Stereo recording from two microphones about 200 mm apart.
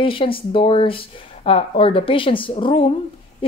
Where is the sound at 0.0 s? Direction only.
25° left (ahead or behind).